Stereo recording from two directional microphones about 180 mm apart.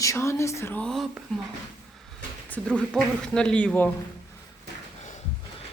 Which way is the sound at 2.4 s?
10° left (ahead or behind).